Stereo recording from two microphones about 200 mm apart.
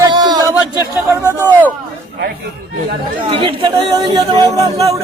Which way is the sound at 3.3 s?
25° right (ahead or behind).